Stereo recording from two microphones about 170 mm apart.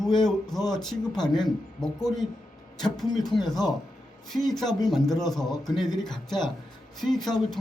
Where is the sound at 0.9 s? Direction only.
5° left (ahead or behind).